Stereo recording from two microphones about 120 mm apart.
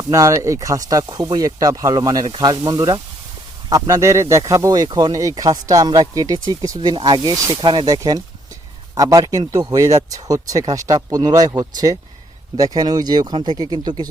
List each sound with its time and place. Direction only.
0.1 s speech: 25° right (ahead or behind)